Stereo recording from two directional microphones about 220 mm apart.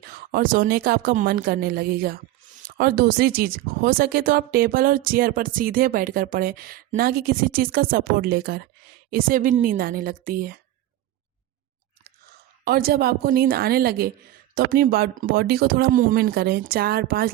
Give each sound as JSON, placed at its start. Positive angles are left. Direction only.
{"t": 0.0, "sound": "a woman's voice", "side_deg": -40}
{"t": 12.6, "sound": "speech", "side_deg": -45}